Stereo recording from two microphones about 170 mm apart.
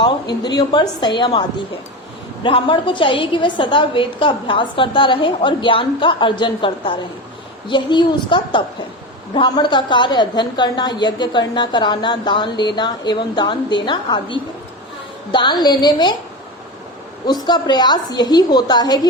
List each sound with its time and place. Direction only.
0.0 s a woman's voice: 25° left (ahead or behind)
17.2 s a woman's voice: 25° left (ahead or behind)